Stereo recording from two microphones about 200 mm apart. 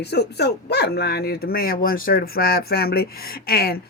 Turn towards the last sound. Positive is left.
turn(degrees=50)  # may be behind; listen again after turning